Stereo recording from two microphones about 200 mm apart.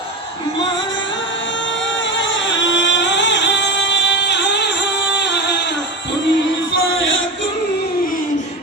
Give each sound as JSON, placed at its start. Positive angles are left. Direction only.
{"t": 2.1, "sound": "music", "side_deg": 65}